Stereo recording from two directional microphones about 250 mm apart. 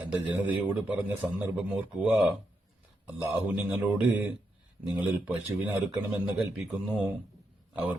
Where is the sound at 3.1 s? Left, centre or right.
Centre.